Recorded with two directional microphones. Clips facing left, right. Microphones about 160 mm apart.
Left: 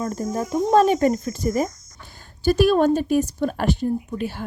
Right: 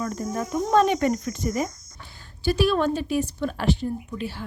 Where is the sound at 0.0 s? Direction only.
35° left (ahead or behind).